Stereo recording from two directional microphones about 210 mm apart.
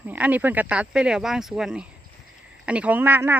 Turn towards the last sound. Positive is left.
turn(degrees=-10)  # may be behind; listen again after turning